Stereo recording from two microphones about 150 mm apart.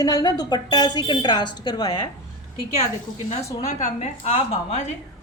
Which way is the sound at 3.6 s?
50° left (ahead or behind).